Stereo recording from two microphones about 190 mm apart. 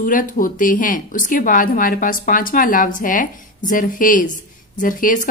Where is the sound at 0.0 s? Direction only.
45° left (ahead or behind).